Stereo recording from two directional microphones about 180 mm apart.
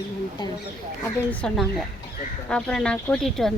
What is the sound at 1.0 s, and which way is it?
A woman's voice, 10° left (ahead or behind).